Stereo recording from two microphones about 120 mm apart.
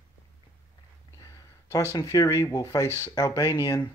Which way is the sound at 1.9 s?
30° left (ahead or behind).